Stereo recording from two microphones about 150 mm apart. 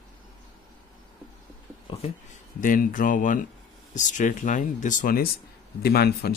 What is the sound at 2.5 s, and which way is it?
Speech, 65° left (ahead or behind).